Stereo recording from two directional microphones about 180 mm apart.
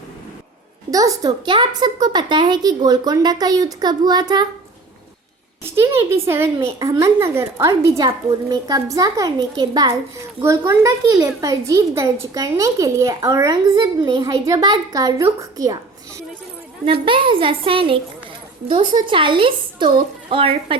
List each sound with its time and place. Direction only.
0.9 s a child's voice: 20° right (ahead or behind)
5.6 s a woman's voice: 15° right (ahead or behind); by 18.0 s 30° right (ahead or behind)
19.0 s a child's voice: 30° right (ahead or behind)